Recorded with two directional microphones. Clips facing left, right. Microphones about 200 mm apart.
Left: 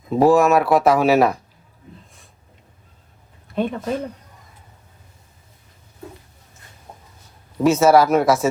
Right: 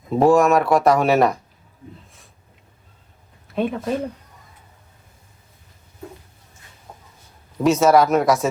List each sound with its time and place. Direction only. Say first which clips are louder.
0.2 s speech: left 1 dB; centre (ahead or behind)
3.4 s speech: even; centre (ahead or behind)
6.9 s chicken: left 1 dB; 20° left (ahead or behind)
7.6 s speech: left 1 dB; centre (ahead or behind)